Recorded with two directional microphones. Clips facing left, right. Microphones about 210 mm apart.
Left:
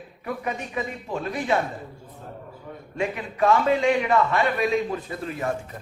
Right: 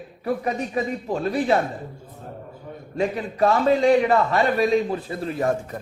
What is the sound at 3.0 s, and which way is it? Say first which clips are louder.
A woman's voice: right 3 dB; 35° right (ahead or behind).